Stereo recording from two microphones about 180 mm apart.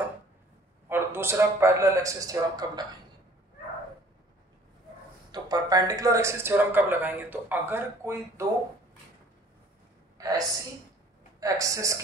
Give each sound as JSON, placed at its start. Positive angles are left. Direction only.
{"t": 0.8, "sound": "speech", "side_deg": -15}
{"t": 5.3, "sound": "speech", "side_deg": -20}
{"t": 10.1, "sound": "a sound", "side_deg": -20}
{"t": 11.3, "sound": "speech", "side_deg": -20}